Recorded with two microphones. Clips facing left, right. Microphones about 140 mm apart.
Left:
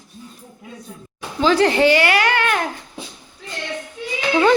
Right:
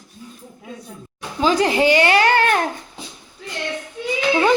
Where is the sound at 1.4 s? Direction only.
15° right (ahead or behind); by 2.6 s 35° right (ahead or behind).